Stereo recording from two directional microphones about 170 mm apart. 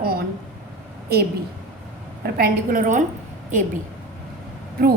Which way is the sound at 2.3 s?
55° right (ahead or behind).